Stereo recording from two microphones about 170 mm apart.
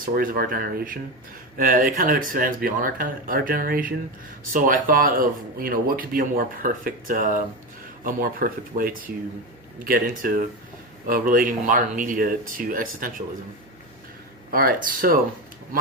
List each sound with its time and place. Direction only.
0.0 s speech: 55° right (ahead or behind)
14.5 s speech: 60° right (ahead or behind)